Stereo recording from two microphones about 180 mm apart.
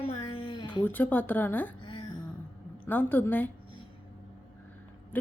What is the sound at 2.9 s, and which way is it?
Speech, 10° left (ahead or behind).